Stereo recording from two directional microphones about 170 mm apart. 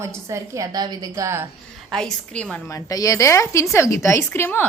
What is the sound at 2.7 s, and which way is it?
A woman's voice, 20° left (ahead or behind).